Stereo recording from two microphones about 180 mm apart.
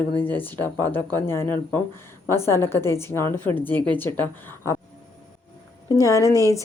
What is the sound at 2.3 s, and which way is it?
Speech, 15° left (ahead or behind).